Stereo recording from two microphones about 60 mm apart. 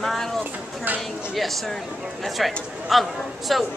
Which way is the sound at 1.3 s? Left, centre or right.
Centre.